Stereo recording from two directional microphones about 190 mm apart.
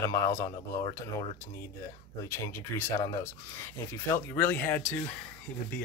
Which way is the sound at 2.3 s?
15° left (ahead or behind).